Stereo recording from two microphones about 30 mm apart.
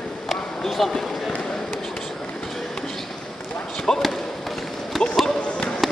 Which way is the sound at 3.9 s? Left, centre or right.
Left.